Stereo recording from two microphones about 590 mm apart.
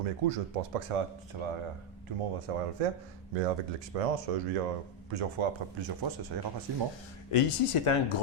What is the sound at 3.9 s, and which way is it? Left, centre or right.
Speech, right.